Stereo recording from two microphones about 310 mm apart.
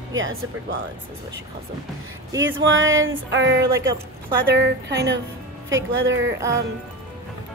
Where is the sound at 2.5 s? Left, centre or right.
Right.